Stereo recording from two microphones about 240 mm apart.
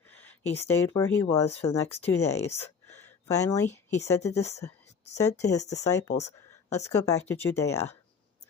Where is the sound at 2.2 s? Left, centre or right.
Centre.